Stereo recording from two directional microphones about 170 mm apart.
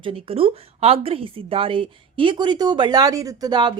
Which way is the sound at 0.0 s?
35° right (ahead or behind).